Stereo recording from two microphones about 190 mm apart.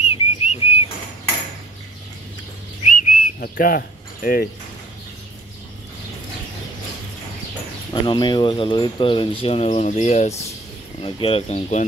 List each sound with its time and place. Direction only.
0.0 s whistle: 35° left (ahead or behind)
2.9 s whistling: 45° left (ahead or behind)
7.9 s speech: 25° left (ahead or behind)